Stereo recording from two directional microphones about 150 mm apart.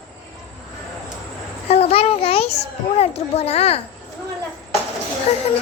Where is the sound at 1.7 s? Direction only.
45° left (ahead or behind).